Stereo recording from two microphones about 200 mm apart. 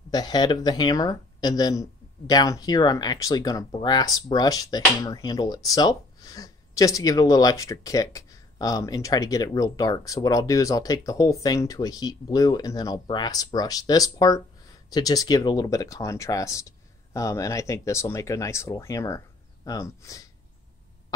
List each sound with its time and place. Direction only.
0.1 s speech: 20° left (ahead or behind)